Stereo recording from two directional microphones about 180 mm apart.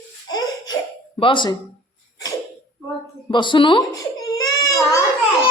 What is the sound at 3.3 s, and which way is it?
A child's voice, 25° left (ahead or behind).